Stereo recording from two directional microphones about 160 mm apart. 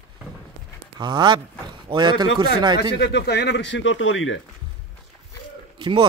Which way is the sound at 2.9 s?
90° left.